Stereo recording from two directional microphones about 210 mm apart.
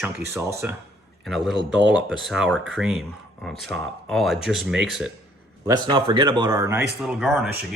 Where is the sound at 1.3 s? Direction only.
Centre (ahead or behind).